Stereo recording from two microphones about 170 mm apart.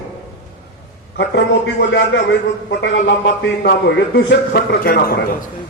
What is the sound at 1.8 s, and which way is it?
Speech, 90° left.